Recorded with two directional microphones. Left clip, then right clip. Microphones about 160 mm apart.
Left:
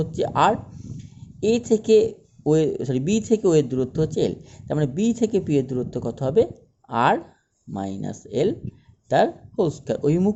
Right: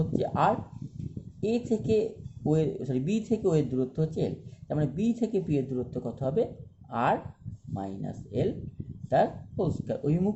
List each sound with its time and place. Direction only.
0.0 s speech: 50° left (ahead or behind)